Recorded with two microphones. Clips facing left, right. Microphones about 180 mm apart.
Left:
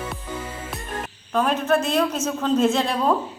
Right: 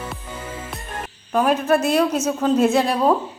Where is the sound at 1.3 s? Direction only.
10° right (ahead or behind).